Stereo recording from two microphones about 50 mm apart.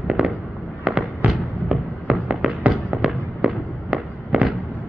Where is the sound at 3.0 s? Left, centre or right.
Centre.